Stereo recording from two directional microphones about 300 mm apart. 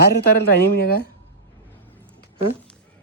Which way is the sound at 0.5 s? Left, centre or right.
Left.